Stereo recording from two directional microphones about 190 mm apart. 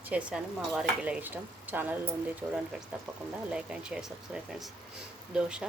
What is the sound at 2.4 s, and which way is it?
Speech, 20° right (ahead or behind).